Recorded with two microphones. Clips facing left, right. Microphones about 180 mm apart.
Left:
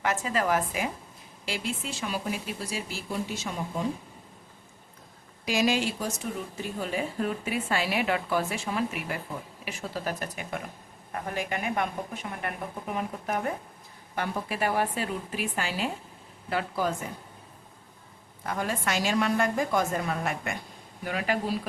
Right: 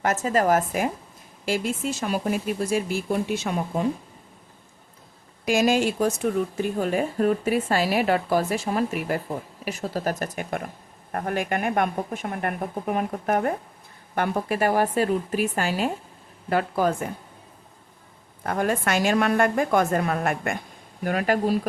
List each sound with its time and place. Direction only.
0.0 s speech: 45° right (ahead or behind); by 3.8 s 60° right (ahead or behind)
5.5 s a woman's voice: 50° right (ahead or behind)
18.4 s a woman's voice: 55° right (ahead or behind)